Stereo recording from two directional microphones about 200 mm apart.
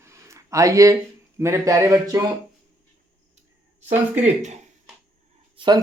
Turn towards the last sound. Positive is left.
turn(degrees=-20)  # may be behind; listen again after turning